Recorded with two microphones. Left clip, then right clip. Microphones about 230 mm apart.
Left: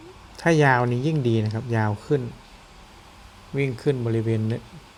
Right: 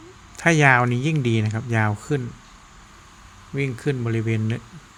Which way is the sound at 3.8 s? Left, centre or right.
Centre.